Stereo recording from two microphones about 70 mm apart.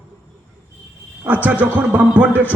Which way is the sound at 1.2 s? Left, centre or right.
Right.